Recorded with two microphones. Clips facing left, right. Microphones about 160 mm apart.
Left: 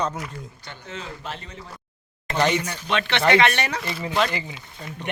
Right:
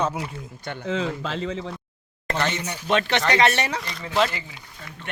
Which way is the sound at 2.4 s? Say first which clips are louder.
Left 6 dB; 15° left (ahead or behind).